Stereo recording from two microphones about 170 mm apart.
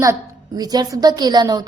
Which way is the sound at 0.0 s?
20° right (ahead or behind).